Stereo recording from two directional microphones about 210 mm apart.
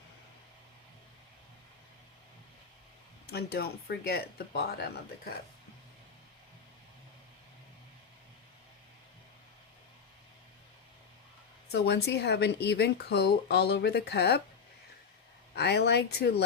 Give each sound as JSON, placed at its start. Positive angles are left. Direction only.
{"t": 3.3, "sound": "speech", "side_deg": 50}
{"t": 11.7, "sound": "speech", "side_deg": 55}
{"t": 15.5, "sound": "speech", "side_deg": 50}